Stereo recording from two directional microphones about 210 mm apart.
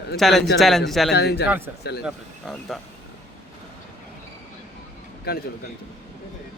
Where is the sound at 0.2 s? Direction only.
Centre (ahead or behind).